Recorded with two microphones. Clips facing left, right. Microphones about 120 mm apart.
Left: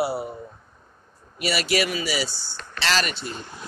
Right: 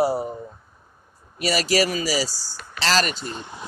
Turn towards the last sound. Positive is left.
turn(degrees=-15)  # may be behind; listen again after turning